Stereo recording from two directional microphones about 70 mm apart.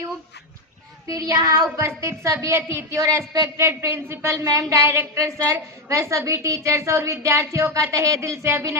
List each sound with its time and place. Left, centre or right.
1.0 s child singing: right
2.0 s a woman's voice: right
3.6 s a woman's voice: right